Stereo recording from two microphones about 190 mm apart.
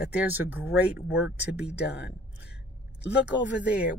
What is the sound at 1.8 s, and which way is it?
Speech, 60° left (ahead or behind).